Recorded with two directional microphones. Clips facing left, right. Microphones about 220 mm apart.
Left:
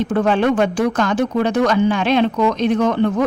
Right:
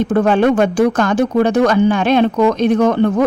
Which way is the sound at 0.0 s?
45° right (ahead or behind).